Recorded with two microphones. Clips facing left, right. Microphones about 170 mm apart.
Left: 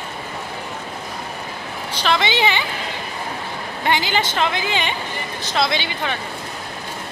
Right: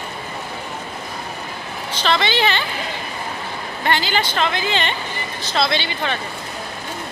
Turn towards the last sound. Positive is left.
turn(degrees=15)  # may be behind; listen again after turning